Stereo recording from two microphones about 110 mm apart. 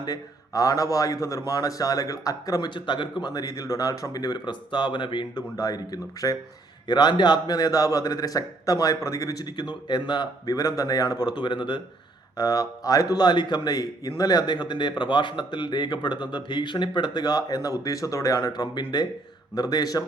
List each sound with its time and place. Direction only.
0.0 s a man's voice: 35° left (ahead or behind)
12.4 s a man's voice: 35° left (ahead or behind)